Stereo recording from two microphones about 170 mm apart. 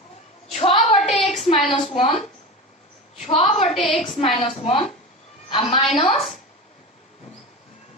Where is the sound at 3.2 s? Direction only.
35° left (ahead or behind).